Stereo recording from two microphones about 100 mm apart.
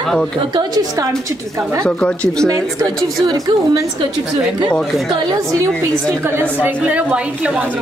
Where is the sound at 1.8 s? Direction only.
15° left (ahead or behind).